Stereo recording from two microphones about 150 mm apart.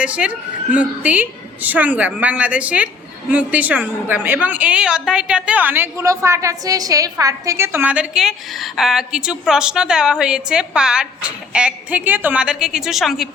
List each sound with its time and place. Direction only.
0.0 s a woman's voice: 10° right (ahead or behind)